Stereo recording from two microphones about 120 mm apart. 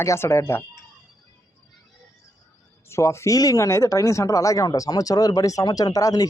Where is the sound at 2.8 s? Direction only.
25° left (ahead or behind).